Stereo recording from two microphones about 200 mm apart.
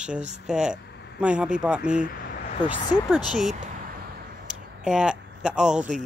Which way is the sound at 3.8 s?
50° right (ahead or behind).